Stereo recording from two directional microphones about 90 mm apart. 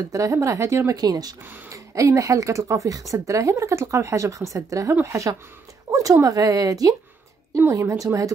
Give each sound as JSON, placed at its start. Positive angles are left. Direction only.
{"t": 0.1, "sound": "speech", "side_deg": -40}
{"t": 1.7, "sound": "speech", "side_deg": -35}
{"t": 5.9, "sound": "a sound", "side_deg": -40}
{"t": 6.1, "sound": "speech", "side_deg": -40}